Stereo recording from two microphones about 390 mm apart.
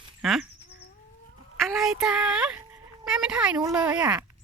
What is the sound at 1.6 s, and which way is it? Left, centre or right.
Child singing, centre.